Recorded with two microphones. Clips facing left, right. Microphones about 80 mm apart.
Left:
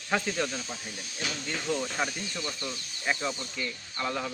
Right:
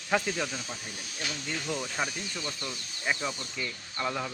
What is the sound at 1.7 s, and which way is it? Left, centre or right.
Speech, centre.